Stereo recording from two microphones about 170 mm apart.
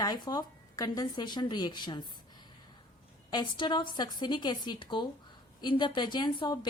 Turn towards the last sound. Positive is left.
turn(degrees=25)  # may be behind; listen again after turning